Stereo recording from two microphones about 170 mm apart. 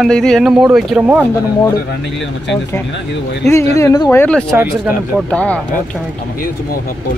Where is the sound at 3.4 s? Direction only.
15° left (ahead or behind).